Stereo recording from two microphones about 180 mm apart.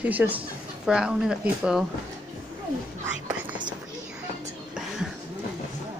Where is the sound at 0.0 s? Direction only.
10° right (ahead or behind).